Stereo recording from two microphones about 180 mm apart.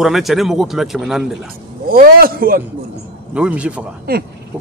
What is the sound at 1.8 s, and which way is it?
Speech, 55° right (ahead or behind).